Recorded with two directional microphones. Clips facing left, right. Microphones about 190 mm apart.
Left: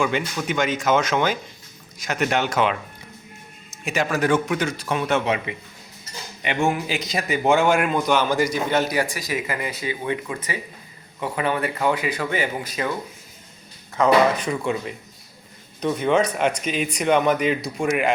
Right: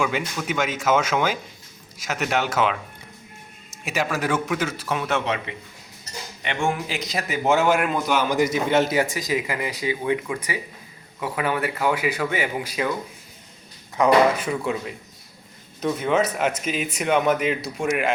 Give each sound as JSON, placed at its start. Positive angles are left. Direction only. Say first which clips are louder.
{"t": 0.3, "sound": "speech", "louder": "left 2 dB", "side_deg": -5}
{"t": 3.8, "sound": "speech", "louder": "left 3 dB", "side_deg": -5}
{"t": 5.2, "sound": "a man's voice", "louder": "left 3 dB", "side_deg": 10}
{"t": 8.4, "sound": "a man's voice", "louder": "right 1 dB", "side_deg": -20}
{"t": 13.9, "sound": "speech", "louder": "even", "side_deg": -10}